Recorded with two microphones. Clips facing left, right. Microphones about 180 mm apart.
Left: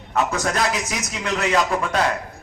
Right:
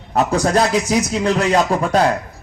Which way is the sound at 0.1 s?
35° right (ahead or behind).